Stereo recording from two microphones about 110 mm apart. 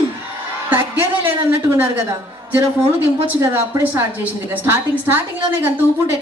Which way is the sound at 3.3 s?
25° right (ahead or behind).